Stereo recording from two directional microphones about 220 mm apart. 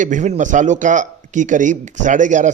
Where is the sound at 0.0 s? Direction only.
35° right (ahead or behind).